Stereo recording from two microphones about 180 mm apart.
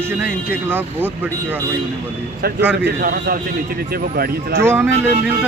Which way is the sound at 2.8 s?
60° right (ahead or behind).